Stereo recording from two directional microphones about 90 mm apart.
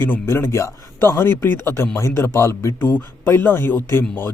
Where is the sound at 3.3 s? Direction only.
25° left (ahead or behind).